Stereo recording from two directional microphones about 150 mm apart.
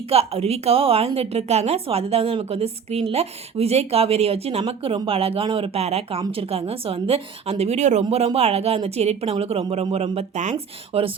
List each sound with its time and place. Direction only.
0.1 s a woman's voice: 40° right (ahead or behind)